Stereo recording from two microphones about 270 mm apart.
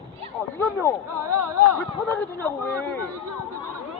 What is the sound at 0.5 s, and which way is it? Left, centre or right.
Speech, centre.